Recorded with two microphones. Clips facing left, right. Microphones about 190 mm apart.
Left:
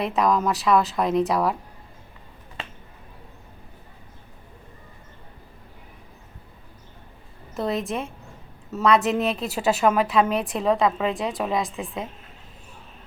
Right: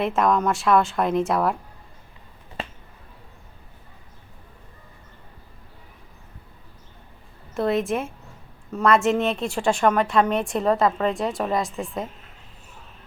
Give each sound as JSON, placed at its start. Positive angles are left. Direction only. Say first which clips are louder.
{"t": 0.2, "sound": "a woman's voice", "louder": "left 1 dB", "side_deg": 0}
{"t": 7.5, "sound": "a woman's voice", "louder": "right 4 dB", "side_deg": 0}